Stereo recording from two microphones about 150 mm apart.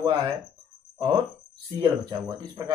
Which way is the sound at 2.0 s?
30° right (ahead or behind).